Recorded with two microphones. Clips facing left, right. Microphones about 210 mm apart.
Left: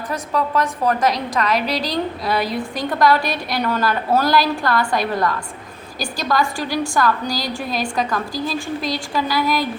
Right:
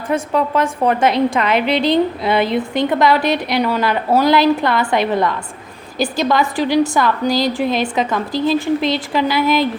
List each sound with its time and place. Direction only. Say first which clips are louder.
0.1 s a woman's voice: right 5 dB; 25° right (ahead or behind)